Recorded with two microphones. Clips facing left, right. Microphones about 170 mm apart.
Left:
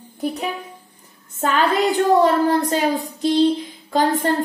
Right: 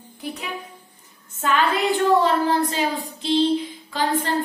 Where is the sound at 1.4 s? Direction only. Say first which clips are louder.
Left 3 dB; 40° left (ahead or behind).